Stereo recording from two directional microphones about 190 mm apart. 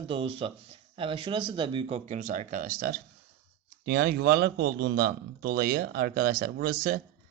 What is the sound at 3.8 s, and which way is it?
Speech, 60° right (ahead or behind).